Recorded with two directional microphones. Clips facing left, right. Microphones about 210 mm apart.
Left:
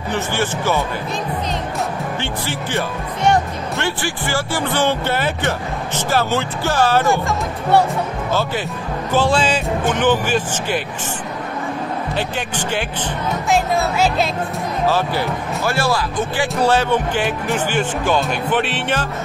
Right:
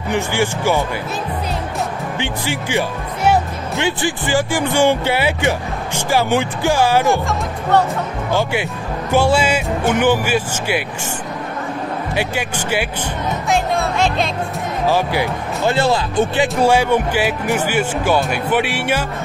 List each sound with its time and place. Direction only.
0.1 s speech: 10° right (ahead or behind)
2.1 s speech: 15° right (ahead or behind)
8.3 s speech: 15° right (ahead or behind)
12.2 s speech: 10° right (ahead or behind)
13.5 s music: 5° left (ahead or behind)
14.9 s speech: 15° right (ahead or behind)
16.6 s speech: 10° right (ahead or behind)